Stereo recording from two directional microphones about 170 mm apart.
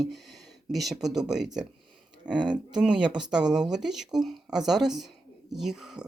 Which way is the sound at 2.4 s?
25° right (ahead or behind).